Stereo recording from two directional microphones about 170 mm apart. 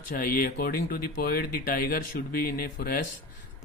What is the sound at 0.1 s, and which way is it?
Speech, 55° left (ahead or behind).